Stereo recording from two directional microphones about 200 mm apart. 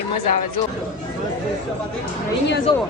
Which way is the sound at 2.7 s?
20° left (ahead or behind).